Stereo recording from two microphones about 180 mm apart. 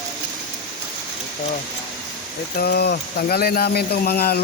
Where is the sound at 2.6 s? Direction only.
60° left (ahead or behind).